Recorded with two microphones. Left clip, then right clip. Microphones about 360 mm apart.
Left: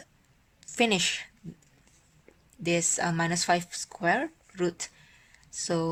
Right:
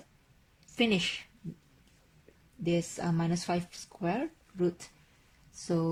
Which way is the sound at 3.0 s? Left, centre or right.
Left.